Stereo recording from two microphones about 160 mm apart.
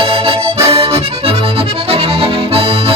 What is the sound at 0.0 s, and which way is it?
Accordion, 35° right (ahead or behind).